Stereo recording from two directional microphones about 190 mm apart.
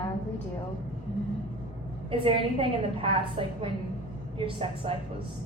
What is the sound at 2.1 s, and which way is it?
A woman's voice, 30° right (ahead or behind).